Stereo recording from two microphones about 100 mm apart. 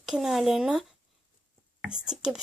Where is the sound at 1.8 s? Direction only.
5° right (ahead or behind).